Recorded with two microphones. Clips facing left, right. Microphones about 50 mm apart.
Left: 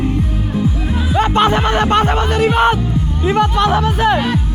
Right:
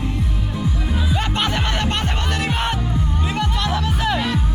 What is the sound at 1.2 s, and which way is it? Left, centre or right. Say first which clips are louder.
Music: left 9 dB; left.